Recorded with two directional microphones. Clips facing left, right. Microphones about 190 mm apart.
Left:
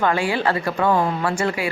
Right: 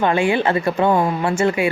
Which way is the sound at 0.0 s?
25° right (ahead or behind).